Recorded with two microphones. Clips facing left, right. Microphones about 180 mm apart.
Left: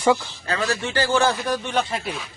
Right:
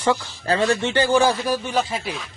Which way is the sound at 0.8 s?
20° right (ahead or behind).